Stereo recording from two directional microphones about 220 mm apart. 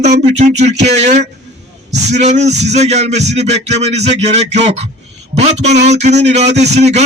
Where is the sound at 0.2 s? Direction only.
30° right (ahead or behind).